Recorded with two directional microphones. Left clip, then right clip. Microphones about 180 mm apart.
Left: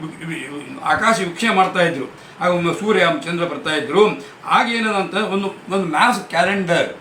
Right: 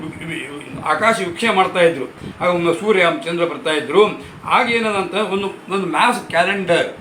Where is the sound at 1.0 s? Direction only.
15° left (ahead or behind).